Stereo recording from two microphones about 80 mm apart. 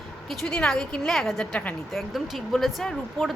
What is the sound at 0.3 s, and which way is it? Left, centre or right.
A woman's voice, centre.